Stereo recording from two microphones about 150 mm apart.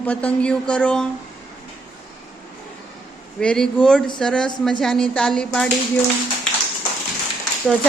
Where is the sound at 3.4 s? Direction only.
5° left (ahead or behind).